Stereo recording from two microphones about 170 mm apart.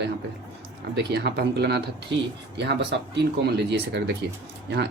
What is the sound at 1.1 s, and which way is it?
Speech, 85° right.